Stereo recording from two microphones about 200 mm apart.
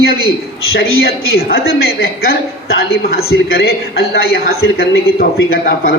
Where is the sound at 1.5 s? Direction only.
50° left (ahead or behind).